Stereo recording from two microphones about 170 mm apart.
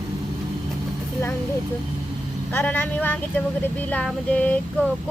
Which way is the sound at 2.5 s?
10° left (ahead or behind).